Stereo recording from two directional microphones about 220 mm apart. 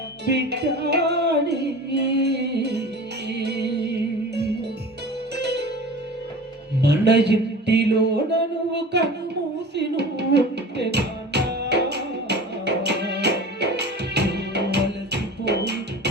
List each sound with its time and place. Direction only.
0.3 s music: 50° right (ahead or behind)
6.8 s music: 50° right (ahead or behind)
8.7 s a sound: 50° right (ahead or behind)
9.7 s music: 50° right (ahead or behind)